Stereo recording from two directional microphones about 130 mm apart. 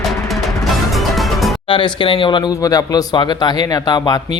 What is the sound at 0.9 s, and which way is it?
Music, centre (ahead or behind).